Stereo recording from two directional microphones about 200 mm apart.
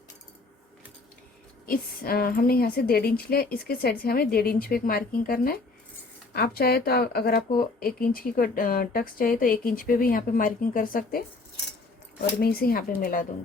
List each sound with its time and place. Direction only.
1.6 s speech: 45° left (ahead or behind)
12.4 s speech: 50° left (ahead or behind)